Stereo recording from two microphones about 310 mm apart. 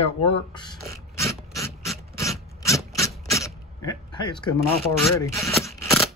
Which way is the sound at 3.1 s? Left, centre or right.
Centre.